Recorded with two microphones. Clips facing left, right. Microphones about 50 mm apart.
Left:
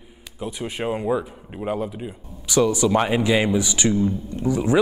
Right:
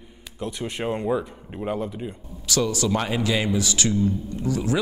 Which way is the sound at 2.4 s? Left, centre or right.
Centre.